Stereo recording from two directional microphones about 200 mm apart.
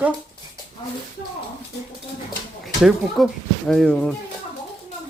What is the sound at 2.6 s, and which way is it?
Speech, centre (ahead or behind).